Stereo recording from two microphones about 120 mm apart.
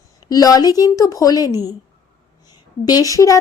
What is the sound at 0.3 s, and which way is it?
A woman's voice, 30° left (ahead or behind).